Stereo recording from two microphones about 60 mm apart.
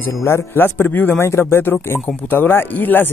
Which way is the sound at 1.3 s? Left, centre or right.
Left.